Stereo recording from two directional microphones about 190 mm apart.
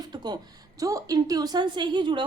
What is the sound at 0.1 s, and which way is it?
A woman's voice, 20° right (ahead or behind).